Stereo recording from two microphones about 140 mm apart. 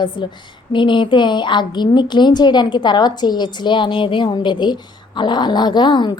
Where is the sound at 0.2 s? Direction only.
30° left (ahead or behind).